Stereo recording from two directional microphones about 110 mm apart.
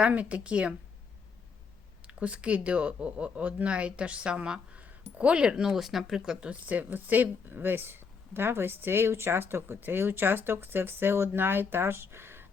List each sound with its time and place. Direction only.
0.0 s speech: 10° right (ahead or behind)
2.1 s speech: 10° right (ahead or behind)